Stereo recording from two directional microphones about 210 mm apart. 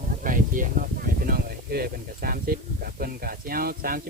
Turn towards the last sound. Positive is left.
turn(degrees=-45)  # may be behind; listen again after turning